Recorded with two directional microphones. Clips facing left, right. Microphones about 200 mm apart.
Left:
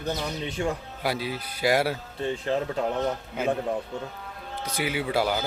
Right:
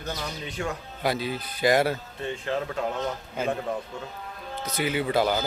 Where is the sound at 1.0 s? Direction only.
10° left (ahead or behind).